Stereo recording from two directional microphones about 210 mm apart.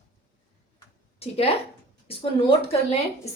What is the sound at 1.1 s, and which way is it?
Speech, 30° left (ahead or behind).